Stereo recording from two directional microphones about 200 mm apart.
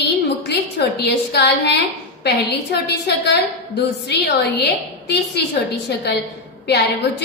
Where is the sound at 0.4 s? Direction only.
55° left (ahead or behind).